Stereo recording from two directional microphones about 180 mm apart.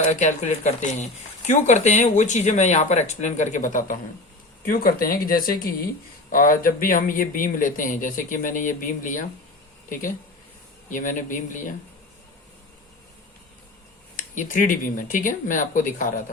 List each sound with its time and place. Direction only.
0.0 s a man's voice: 40° left (ahead or behind)
10.8 s a man's voice: 45° left (ahead or behind)
14.2 s a man's voice: 45° left (ahead or behind)